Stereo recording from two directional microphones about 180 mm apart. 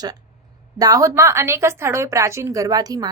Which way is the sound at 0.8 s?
20° right (ahead or behind).